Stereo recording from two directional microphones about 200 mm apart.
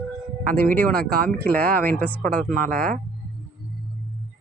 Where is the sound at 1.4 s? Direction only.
10° left (ahead or behind).